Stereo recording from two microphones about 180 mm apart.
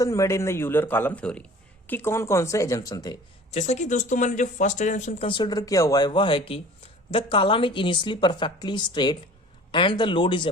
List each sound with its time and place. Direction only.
0.0 s a man's voice: 15° left (ahead or behind)
3.5 s speech: 40° left (ahead or behind)
5.3 s a woman's voice: 25° left (ahead or behind)